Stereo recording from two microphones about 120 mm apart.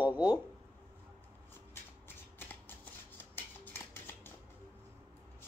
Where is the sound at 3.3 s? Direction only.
15° left (ahead or behind).